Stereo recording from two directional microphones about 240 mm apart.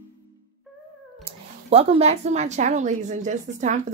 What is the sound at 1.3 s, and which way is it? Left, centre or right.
Speech, right.